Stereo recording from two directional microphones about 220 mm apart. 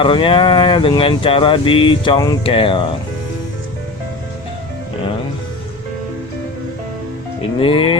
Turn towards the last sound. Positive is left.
turn(degrees=25)  # may be behind; listen again after turning